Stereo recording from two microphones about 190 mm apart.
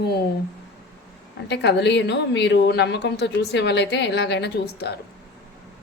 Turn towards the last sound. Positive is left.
turn(degrees=60)  # may be behind; listen again after turning